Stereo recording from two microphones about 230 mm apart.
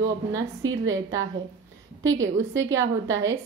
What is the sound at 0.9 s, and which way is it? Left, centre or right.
Speech, right.